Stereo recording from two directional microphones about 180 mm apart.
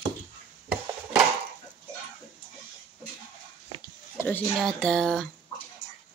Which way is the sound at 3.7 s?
30° right (ahead or behind).